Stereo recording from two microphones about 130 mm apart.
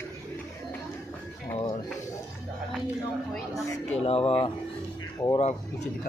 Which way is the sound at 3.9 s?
50° left (ahead or behind).